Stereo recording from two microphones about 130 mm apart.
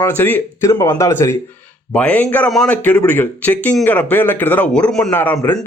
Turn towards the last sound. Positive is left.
turn(degrees=10)  # may be behind; listen again after turning